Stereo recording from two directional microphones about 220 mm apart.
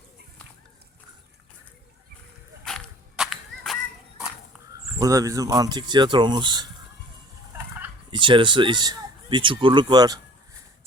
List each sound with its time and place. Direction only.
2.6 s a sound: centre (ahead or behind)
4.9 s speech: 15° right (ahead or behind)
8.1 s speech: 20° right (ahead or behind)